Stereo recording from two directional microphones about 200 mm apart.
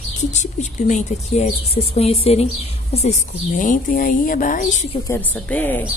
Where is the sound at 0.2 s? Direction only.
35° left (ahead or behind).